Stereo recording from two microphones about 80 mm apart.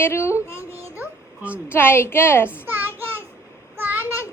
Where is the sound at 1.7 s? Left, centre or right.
Left.